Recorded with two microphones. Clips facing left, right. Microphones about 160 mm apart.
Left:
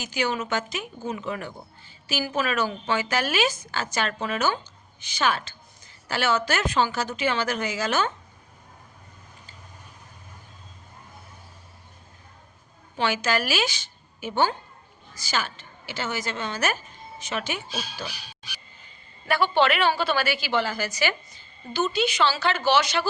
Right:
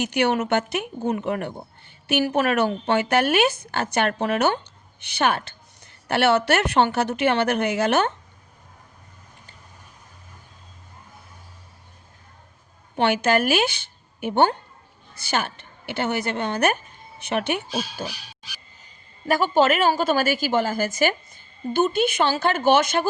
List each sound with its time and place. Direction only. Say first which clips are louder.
0.0 s a woman's voice: right 6 dB; 65° right (ahead or behind)
13.0 s a woman's voice: right 5 dB; 60° right (ahead or behind)
19.3 s a woman's voice: right 3 dB; 40° right (ahead or behind)